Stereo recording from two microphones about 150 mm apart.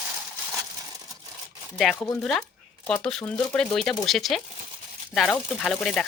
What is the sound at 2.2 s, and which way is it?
Speech, centre (ahead or behind).